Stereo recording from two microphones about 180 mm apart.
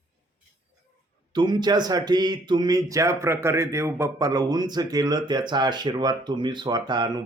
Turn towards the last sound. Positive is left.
turn(degrees=-25)  # may be behind; listen again after turning